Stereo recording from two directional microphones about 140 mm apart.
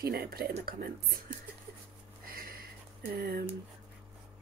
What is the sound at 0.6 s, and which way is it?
Speech, 90° right.